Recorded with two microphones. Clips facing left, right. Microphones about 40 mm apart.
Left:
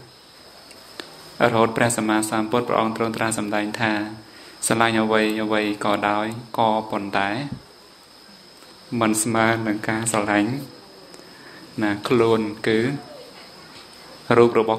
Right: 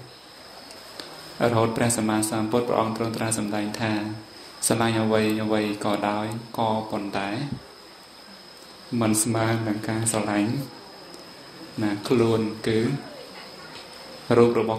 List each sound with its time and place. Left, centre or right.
0.9 s speech: left
8.9 s speech: left
11.8 s speech: left
14.2 s speech: left